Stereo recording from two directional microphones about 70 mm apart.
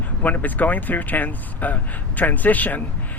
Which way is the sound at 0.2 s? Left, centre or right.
Left.